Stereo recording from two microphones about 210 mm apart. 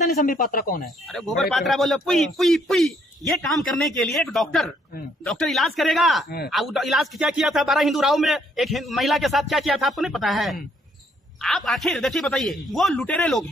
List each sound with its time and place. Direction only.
0.1 s speech: 40° left (ahead or behind)
0.8 s a man's voice: centre (ahead or behind)